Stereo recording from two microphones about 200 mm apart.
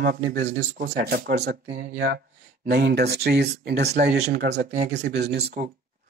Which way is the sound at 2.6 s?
55° right (ahead or behind).